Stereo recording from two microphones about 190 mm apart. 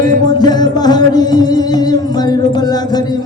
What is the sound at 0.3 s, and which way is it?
Music, 20° left (ahead or behind).